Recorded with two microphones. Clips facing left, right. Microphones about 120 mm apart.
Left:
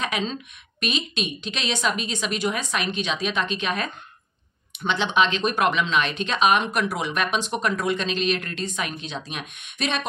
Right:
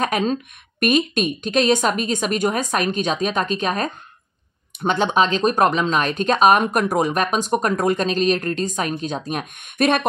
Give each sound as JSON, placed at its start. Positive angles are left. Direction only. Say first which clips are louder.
{"t": 0.0, "sound": "speech", "louder": "right 7 dB", "side_deg": -50}